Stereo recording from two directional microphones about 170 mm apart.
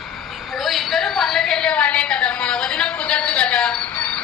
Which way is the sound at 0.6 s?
Centre (ahead or behind).